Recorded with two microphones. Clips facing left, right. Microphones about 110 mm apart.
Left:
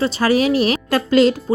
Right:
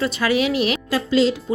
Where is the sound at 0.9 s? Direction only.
55° left (ahead or behind).